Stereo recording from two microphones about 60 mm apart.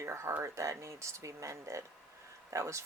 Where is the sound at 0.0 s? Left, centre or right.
Right.